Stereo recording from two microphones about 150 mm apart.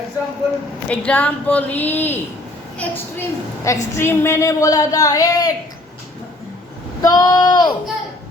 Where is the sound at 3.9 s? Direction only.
15° left (ahead or behind).